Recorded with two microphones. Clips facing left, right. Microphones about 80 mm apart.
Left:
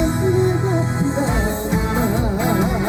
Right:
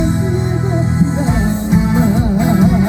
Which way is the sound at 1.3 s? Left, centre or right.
Centre.